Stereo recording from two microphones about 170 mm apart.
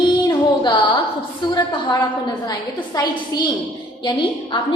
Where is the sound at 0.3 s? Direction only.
25° left (ahead or behind).